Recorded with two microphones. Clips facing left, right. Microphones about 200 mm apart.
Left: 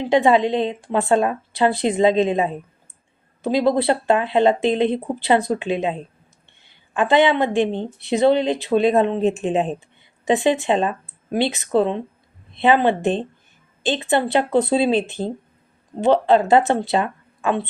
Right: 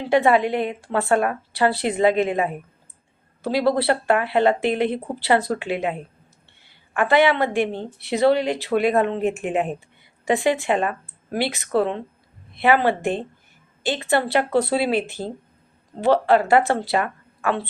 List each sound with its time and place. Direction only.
0.0 s a woman's voice: 20° left (ahead or behind)